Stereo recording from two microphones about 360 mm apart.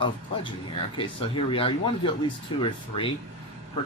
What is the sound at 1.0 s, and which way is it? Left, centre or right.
Speech, centre.